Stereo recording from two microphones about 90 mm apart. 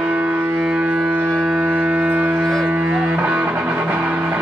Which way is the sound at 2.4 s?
Centre (ahead or behind).